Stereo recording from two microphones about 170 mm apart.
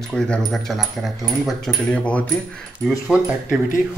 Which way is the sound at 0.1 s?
5° left (ahead or behind).